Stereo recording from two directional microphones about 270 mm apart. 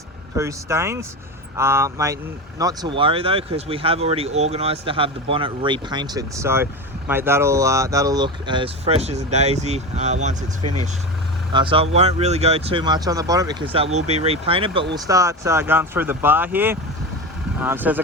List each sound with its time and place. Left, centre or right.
0.3 s speech: centre
10.6 s speech: right
11.5 s speech: centre